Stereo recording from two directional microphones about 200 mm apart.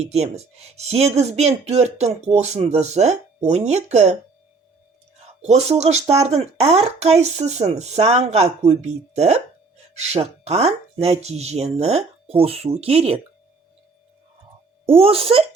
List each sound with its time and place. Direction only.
0.0 s speech: 30° right (ahead or behind)
5.4 s speech: 35° right (ahead or behind)
14.9 s speech: 30° right (ahead or behind)